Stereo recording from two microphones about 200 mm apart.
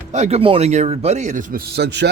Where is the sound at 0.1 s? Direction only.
35° right (ahead or behind).